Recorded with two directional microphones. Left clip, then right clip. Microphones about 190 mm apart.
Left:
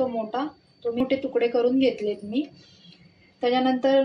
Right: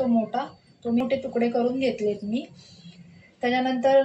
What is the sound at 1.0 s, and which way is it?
A woman's voice, 50° left (ahead or behind).